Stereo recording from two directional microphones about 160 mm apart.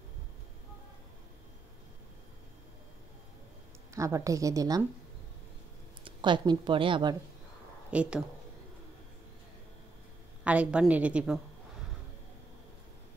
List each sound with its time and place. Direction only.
3.9 s speech: 20° right (ahead or behind)
6.0 s speech: 30° right (ahead or behind)
7.9 s speech: 5° right (ahead or behind)
10.4 s a woman's voice: 10° right (ahead or behind)